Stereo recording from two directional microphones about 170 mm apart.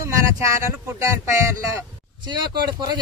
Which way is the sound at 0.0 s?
15° right (ahead or behind).